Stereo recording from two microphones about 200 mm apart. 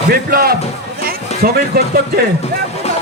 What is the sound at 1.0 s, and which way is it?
Music, 45° right (ahead or behind).